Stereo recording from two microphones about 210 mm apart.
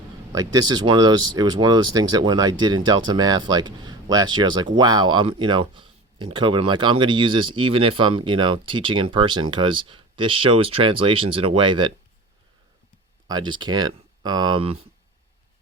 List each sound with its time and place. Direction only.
0.3 s speech: 20° right (ahead or behind)
13.2 s speech: 20° right (ahead or behind)